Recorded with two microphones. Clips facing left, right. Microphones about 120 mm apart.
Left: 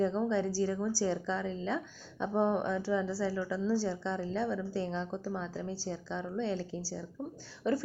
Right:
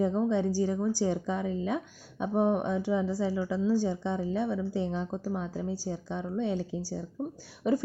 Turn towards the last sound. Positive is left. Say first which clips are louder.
# right 4 dB
turn(degrees=-15)  # may be behind; listen again after turning